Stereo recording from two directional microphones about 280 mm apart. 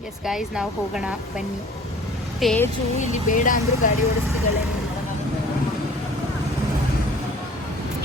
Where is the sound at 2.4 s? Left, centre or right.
Centre.